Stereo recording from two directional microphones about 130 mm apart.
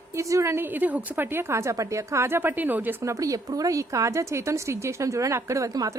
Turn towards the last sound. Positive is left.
turn(degrees=-25)  # may be behind; listen again after turning